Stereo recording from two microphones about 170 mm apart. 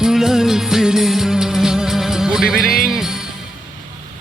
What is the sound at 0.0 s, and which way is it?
Music, 5° right (ahead or behind).